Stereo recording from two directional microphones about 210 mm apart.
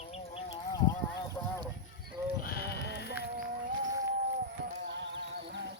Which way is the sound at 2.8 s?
55° left (ahead or behind).